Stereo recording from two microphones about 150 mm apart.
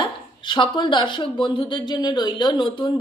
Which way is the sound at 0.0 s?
30° left (ahead or behind).